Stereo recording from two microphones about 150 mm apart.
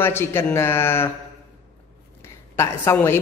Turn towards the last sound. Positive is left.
turn(degrees=15)  # may be behind; listen again after turning